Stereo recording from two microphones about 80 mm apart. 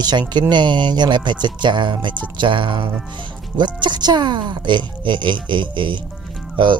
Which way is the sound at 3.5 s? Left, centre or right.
Right.